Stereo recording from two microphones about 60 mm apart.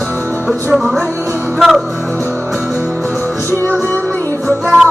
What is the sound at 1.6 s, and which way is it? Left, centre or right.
Music, centre.